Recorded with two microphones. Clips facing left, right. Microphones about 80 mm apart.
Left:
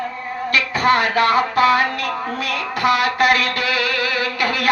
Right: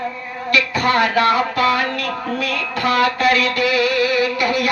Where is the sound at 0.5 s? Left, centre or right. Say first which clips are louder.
Even; left.